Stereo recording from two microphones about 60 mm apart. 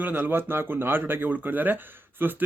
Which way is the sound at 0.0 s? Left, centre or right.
Right.